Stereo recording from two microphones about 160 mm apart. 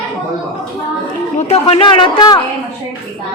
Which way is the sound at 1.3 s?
40° left (ahead or behind).